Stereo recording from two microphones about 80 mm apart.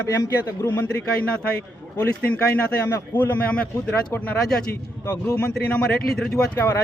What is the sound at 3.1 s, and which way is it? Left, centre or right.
Speech, left.